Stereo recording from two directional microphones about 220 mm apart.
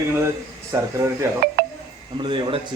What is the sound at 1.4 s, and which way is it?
Speech, 45° right (ahead or behind).